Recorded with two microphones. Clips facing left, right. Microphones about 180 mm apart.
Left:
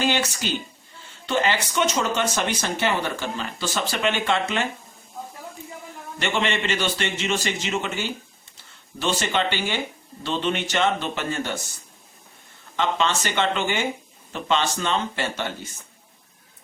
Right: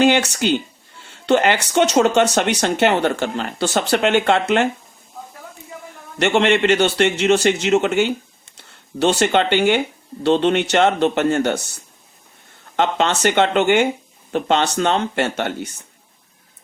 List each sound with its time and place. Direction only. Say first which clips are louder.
0.0 s speech: right 8 dB; 65° right (ahead or behind)
6.1 s speech: right 9 dB; 70° right (ahead or behind)
12.7 s speech: right 5 dB; 65° right (ahead or behind)